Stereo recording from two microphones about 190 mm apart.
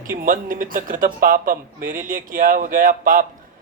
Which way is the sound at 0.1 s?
45° right (ahead or behind).